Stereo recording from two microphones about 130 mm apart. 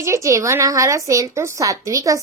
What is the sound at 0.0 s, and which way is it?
A woman's voice, 25° right (ahead or behind).